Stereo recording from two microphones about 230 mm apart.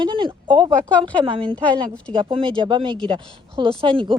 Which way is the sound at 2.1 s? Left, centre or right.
Right.